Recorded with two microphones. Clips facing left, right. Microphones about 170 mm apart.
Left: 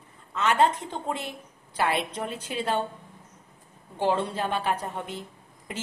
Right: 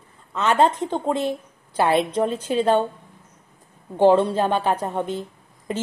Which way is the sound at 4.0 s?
35° right (ahead or behind).